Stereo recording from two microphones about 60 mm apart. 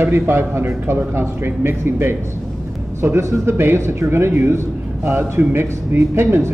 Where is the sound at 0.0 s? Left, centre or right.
Right.